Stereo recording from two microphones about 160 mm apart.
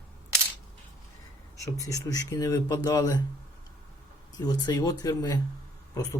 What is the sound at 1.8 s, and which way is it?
Speech, 20° left (ahead or behind).